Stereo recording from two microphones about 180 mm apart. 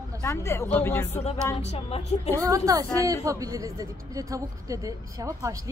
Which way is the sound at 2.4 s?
20° right (ahead or behind).